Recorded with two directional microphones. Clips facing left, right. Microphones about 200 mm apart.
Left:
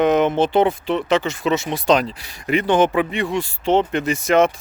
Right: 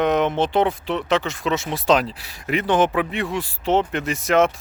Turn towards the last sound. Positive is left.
turn(degrees=0)  # may be behind; listen again after turning